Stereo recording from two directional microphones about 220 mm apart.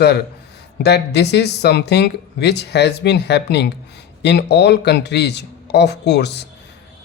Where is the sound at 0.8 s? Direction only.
50° left (ahead or behind).